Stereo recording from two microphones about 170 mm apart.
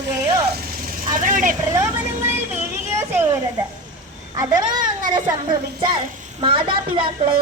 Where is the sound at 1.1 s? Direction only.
50° right (ahead or behind).